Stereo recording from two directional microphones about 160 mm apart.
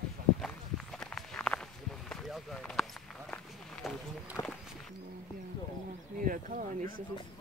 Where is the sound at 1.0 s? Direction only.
5° left (ahead or behind).